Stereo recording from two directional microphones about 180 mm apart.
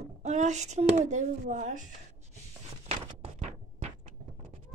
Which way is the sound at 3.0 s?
35° right (ahead or behind).